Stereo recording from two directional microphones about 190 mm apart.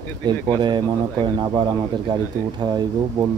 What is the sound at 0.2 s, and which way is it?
Speech, 25° right (ahead or behind).